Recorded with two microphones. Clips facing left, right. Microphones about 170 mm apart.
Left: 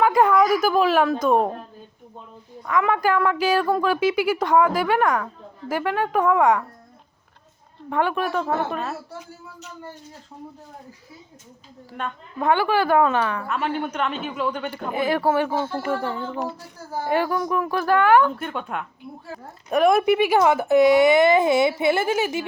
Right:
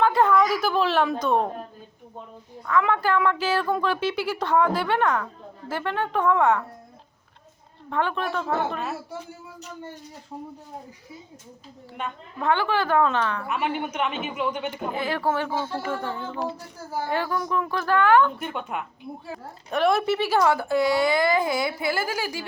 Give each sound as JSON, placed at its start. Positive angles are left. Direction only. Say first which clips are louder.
{"t": 0.0, "sound": "a sound", "louder": "left 2 dB", "side_deg": 10}
{"t": 0.6, "sound": "speech", "louder": "left 4 dB", "side_deg": 10}
{"t": 2.8, "sound": "speech", "louder": "left 5 dB", "side_deg": 10}
{"t": 7.9, "sound": "speech", "louder": "left 3 dB", "side_deg": 10}
{"t": 12.4, "sound": "speech", "louder": "left 3 dB", "side_deg": 10}
{"t": 13.5, "sound": "a man's voice", "louder": "left 2 dB", "side_deg": -10}
{"t": 14.9, "sound": "speech", "louder": "left 6 dB", "side_deg": 15}
{"t": 17.1, "sound": "speech", "louder": "left 5 dB", "side_deg": 15}
{"t": 18.3, "sound": "speech", "louder": "left 2 dB", "side_deg": -5}
{"t": 20.0, "sound": "a woman's voice", "louder": "left 4 dB", "side_deg": 15}